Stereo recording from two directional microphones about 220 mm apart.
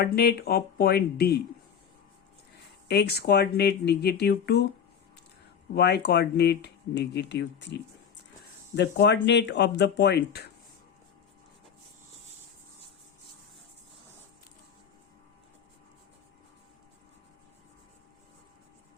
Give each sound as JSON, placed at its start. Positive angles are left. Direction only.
{"t": 0.0, "sound": "speech", "side_deg": 45}
{"t": 2.8, "sound": "speech", "side_deg": 50}
{"t": 5.7, "sound": "speech", "side_deg": 50}